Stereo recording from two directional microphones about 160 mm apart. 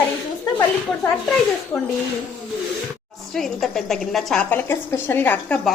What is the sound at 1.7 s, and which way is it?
Speech, 15° left (ahead or behind).